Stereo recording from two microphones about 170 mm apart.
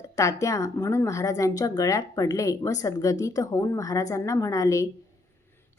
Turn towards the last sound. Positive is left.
turn(degrees=20)  # may be behind; listen again after turning